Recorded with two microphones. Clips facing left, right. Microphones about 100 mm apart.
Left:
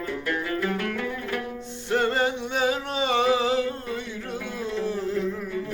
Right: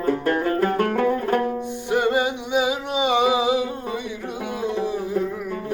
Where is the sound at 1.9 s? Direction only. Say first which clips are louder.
Right 3 dB; 15° right (ahead or behind).